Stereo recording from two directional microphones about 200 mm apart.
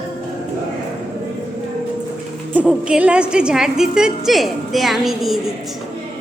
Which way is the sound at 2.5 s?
5° right (ahead or behind).